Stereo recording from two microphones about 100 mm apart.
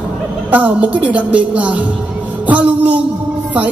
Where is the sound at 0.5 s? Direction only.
15° right (ahead or behind).